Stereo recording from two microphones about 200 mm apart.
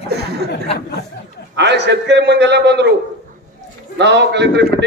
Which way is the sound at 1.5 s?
60° right (ahead or behind).